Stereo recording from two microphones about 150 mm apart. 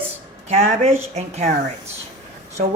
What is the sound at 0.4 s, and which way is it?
Speech, 50° right (ahead or behind).